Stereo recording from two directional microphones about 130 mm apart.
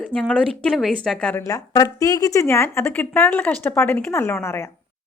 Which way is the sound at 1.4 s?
25° left (ahead or behind).